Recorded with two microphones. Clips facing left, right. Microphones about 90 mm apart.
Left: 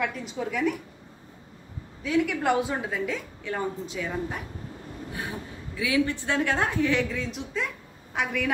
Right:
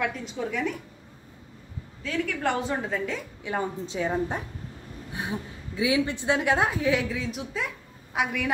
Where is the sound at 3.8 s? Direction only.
30° right (ahead or behind).